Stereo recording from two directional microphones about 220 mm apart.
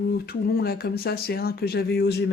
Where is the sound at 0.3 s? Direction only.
45° left (ahead or behind).